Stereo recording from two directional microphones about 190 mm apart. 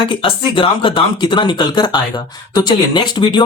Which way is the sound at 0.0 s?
25° left (ahead or behind).